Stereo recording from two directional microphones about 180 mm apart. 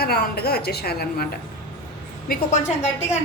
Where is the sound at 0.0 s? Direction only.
60° left (ahead or behind).